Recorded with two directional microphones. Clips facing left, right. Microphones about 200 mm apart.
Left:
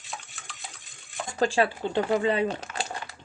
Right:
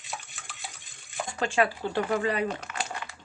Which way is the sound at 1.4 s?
30° left (ahead or behind).